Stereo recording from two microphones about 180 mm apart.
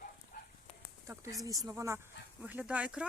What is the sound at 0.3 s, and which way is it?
Dog, 50° left (ahead or behind).